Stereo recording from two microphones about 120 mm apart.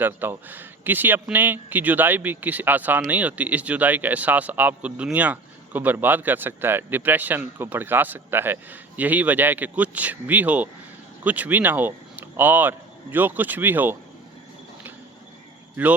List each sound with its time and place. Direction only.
0.0 s speech: 15° right (ahead or behind)